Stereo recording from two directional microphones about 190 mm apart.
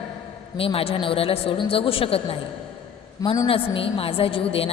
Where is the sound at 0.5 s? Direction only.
30° left (ahead or behind).